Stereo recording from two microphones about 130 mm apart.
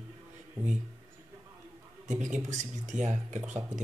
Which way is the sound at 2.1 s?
70° right (ahead or behind).